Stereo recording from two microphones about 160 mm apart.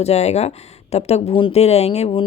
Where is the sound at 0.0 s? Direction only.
40° left (ahead or behind).